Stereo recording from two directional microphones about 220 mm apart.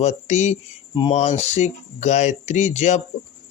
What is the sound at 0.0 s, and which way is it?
Speech, 30° left (ahead or behind).